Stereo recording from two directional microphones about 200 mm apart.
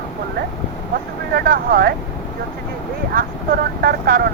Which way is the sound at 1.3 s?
50° right (ahead or behind).